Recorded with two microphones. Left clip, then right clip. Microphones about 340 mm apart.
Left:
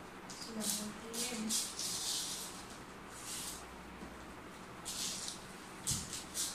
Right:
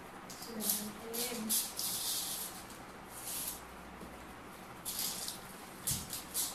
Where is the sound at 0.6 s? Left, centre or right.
Centre.